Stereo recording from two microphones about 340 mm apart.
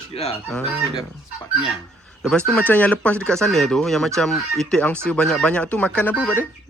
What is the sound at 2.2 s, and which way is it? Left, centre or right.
Speech, centre.